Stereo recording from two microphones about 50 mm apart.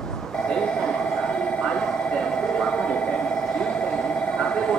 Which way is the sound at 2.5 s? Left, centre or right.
Centre.